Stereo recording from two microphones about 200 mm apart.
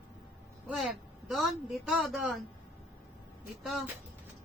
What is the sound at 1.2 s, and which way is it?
A woman's voice, centre (ahead or behind).